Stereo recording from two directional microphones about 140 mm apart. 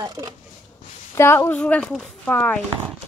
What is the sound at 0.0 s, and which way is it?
Speech, 30° right (ahead or behind).